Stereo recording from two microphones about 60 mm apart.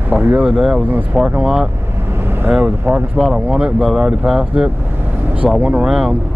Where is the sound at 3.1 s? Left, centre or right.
Centre.